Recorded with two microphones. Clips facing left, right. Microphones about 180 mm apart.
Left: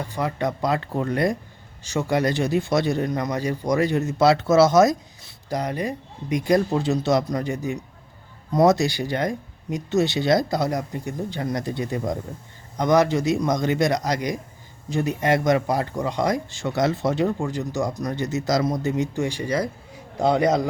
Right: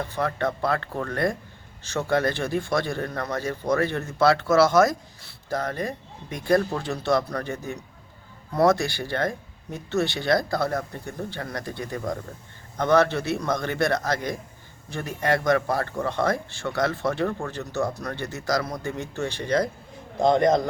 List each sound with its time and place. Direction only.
0.0 s speech: 15° left (ahead or behind)